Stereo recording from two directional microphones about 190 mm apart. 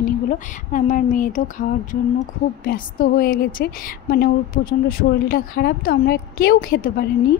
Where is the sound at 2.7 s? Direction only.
50° left (ahead or behind).